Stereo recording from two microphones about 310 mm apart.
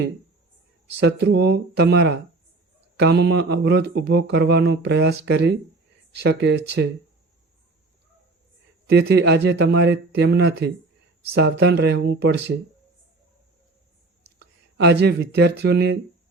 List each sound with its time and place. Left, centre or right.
0.9 s speech: right
8.9 s speech: right
14.3 s speech: right